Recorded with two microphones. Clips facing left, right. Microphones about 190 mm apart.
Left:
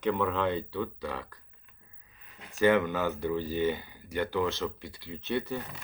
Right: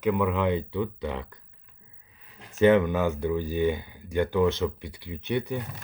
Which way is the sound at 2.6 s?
20° right (ahead or behind).